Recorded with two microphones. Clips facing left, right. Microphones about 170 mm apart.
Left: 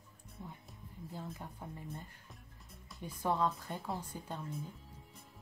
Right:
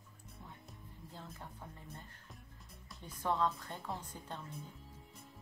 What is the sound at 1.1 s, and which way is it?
A woman's voice, 15° left (ahead or behind).